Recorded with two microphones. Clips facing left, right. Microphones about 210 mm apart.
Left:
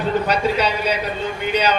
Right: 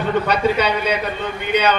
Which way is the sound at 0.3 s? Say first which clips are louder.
Right 1 dB; 55° right (ahead or behind).